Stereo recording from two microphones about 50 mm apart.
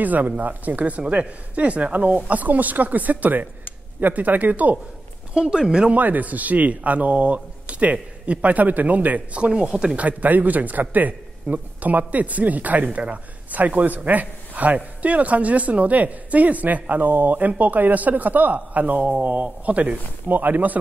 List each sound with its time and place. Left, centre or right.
0.0 s speech: right
5.3 s speech: centre
5.9 s speech: right